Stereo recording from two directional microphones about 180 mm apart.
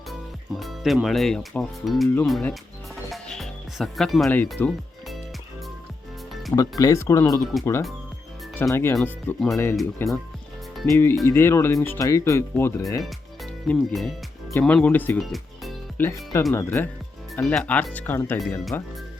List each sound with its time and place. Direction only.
0.1 s speech: centre (ahead or behind)
3.1 s music: centre (ahead or behind)
6.5 s speech: 20° left (ahead or behind)
13.0 s speech: centre (ahead or behind)
16.0 s speech: 10° left (ahead or behind)
18.3 s speech: centre (ahead or behind)